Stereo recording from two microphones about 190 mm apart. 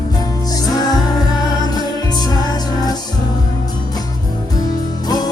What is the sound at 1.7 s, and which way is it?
Music, 20° left (ahead or behind).